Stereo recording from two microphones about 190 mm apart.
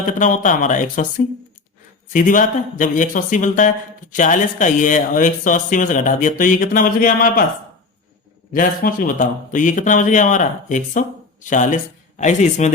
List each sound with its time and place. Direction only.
0.0 s speech: 40° left (ahead or behind)
2.1 s speech: 45° left (ahead or behind)
8.5 s speech: 45° left (ahead or behind)